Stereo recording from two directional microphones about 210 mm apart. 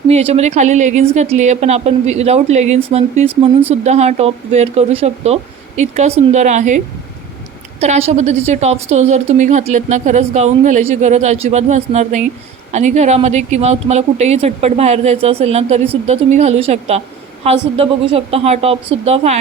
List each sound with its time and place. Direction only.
0.1 s a woman's voice: 30° right (ahead or behind)